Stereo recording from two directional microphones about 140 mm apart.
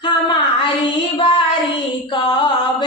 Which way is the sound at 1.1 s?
35° left (ahead or behind).